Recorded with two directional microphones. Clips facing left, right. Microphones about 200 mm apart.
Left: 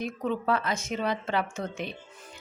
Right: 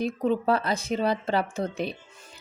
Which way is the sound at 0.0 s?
35° right (ahead or behind).